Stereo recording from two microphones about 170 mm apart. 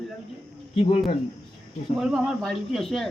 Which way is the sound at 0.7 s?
35° left (ahead or behind).